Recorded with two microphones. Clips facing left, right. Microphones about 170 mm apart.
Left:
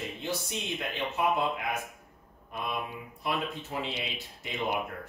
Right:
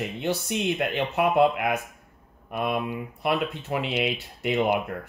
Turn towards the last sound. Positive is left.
turn(degrees=-65)  # may be behind; listen again after turning